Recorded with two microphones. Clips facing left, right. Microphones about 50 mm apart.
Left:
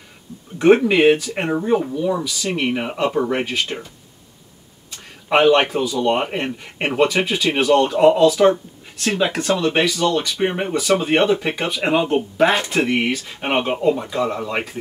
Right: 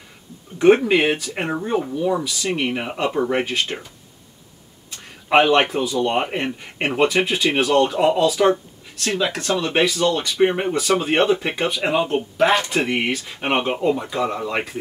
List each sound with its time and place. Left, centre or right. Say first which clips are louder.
0.6 s speech: left 1 dB; centre
5.3 s speech: left 1 dB; centre
9.0 s speech: left 3 dB; centre
9.6 s speech: right 1 dB; centre
12.8 s speech: left 2 dB; centre
13.4 s speech: even; centre